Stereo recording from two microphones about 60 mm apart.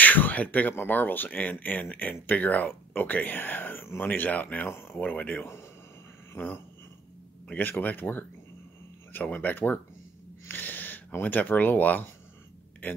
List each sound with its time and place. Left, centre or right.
0.0 s speech: left
4.6 s speech: left
6.3 s a sound: left
7.4 s speech: left